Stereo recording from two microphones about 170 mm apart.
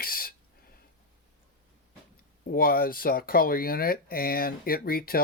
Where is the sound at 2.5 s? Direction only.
60° left (ahead or behind).